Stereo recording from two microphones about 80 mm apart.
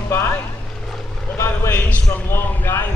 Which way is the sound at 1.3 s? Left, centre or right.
Left.